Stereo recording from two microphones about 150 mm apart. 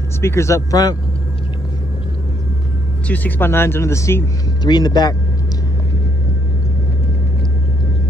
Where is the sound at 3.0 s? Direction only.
10° left (ahead or behind); by 5.7 s 25° left (ahead or behind).